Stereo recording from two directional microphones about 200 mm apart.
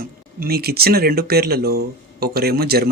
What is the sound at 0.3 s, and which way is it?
Speech, 50° right (ahead or behind).